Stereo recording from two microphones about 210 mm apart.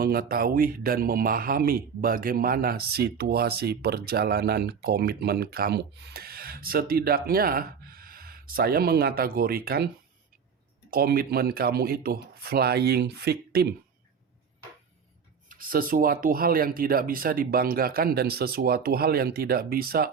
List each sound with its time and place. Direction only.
0.0 s speech: 45° right (ahead or behind)
10.9 s speech: 45° right (ahead or behind)
15.4 s speech: 40° right (ahead or behind)